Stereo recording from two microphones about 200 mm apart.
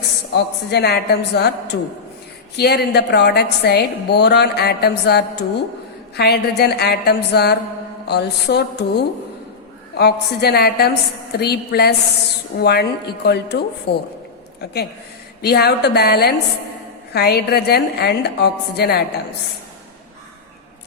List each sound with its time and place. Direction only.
0.3 s a woman's voice: 55° left (ahead or behind)